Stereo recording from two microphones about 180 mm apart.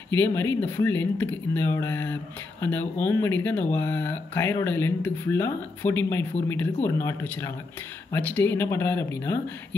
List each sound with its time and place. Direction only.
0.1 s speech: 10° left (ahead or behind)